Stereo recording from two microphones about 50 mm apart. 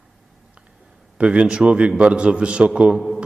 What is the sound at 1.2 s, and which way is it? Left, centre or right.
A man's voice, centre.